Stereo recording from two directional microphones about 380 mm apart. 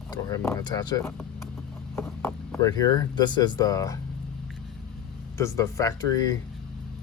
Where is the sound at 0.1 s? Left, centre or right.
Centre.